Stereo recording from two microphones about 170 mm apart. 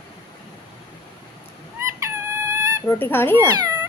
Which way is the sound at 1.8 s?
15° right (ahead or behind).